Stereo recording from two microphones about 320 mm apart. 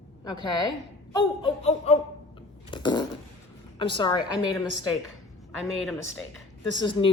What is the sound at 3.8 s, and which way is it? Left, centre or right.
Speech, centre.